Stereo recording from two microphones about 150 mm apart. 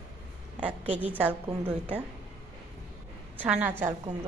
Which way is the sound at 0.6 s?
10° right (ahead or behind).